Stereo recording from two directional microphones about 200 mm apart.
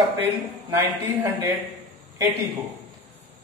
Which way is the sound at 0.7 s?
15° right (ahead or behind).